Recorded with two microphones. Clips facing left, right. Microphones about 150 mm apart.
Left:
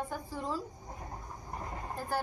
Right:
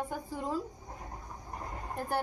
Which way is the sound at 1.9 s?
20° right (ahead or behind).